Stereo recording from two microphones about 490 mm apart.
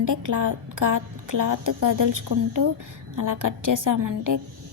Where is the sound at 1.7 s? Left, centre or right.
Right.